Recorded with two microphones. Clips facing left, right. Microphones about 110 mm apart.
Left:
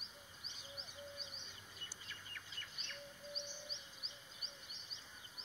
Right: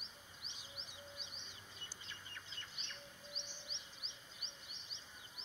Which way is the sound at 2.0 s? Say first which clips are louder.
Even; 25° right (ahead or behind).